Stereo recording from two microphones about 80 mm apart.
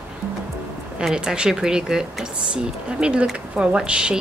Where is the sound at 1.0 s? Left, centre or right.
Centre.